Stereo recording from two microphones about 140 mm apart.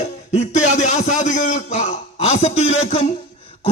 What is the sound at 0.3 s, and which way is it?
A man's voice, 55° left (ahead or behind).